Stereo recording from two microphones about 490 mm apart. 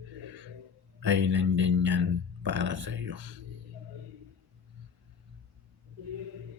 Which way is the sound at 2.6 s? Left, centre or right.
Right.